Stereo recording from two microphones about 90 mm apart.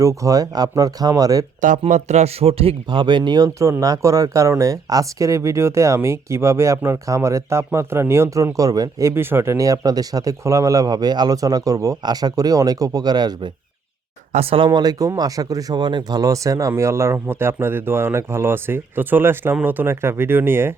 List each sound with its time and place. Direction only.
0.0 s speech: 40° right (ahead or behind)
2.4 s speech: 90° right; by 13.5 s 50° right (ahead or behind)
14.7 s speech: 50° right (ahead or behind); by 20.7 s 25° right (ahead or behind)